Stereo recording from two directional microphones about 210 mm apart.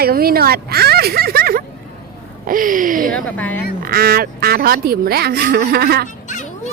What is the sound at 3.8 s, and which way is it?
Speech, 45° right (ahead or behind).